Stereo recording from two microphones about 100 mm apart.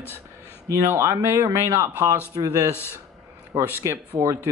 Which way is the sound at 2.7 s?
25° left (ahead or behind).